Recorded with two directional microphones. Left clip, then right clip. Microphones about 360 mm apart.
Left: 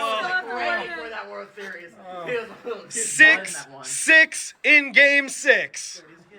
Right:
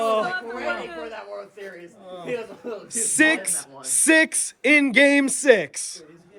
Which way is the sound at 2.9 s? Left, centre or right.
Centre.